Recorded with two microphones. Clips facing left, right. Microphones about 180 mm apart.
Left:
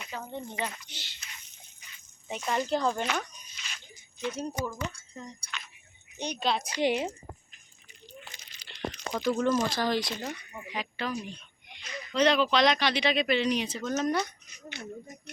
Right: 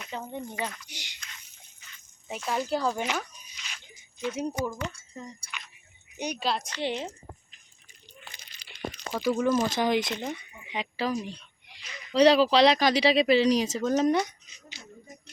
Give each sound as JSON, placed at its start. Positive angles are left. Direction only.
{"t": 0.1, "sound": "speech", "side_deg": -15}
{"t": 2.2, "sound": "speech", "side_deg": -5}
{"t": 3.2, "sound": "dog", "side_deg": -10}
{"t": 4.4, "sound": "speech", "side_deg": -15}
{"t": 6.7, "sound": "a woman's voice", "side_deg": 15}
{"t": 9.1, "sound": "speech", "side_deg": -5}
{"t": 9.6, "sound": "speech", "side_deg": -20}
{"t": 10.7, "sound": "speech", "side_deg": -30}
{"t": 14.7, "sound": "speech", "side_deg": 60}